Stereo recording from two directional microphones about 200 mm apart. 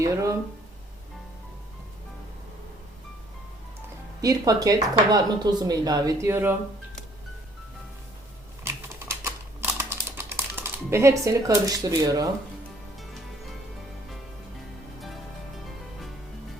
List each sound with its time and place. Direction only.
0.0 s speech: 15° right (ahead or behind)
4.2 s speech: 15° right (ahead or behind)
8.6 s typing: 15° right (ahead or behind)